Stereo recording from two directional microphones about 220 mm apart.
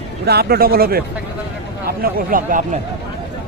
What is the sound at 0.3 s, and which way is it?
Speech, 45° right (ahead or behind).